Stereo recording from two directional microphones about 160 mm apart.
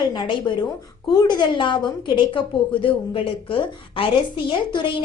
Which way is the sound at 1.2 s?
30° left (ahead or behind).